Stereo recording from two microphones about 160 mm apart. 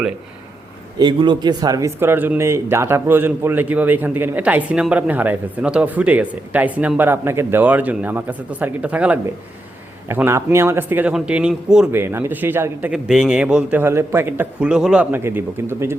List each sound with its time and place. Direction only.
0.9 s speech: 30° right (ahead or behind)
12.9 s speech: 5° right (ahead or behind)